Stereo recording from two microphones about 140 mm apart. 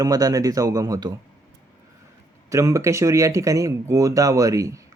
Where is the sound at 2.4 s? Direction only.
25° right (ahead or behind).